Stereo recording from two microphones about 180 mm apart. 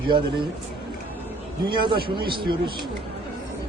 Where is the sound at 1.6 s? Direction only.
25° right (ahead or behind).